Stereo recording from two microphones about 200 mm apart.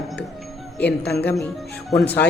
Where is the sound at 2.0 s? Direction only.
5° left (ahead or behind).